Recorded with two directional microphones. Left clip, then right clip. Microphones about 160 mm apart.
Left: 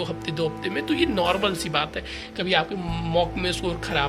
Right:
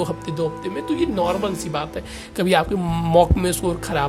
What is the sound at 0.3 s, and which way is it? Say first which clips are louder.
Speech: right 2 dB; 25° right (ahead or behind).